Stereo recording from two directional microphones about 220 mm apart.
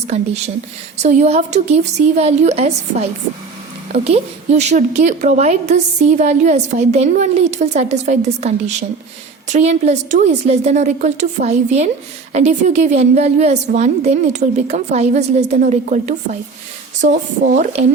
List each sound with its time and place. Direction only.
1.0 s a woman's voice: 30° right (ahead or behind)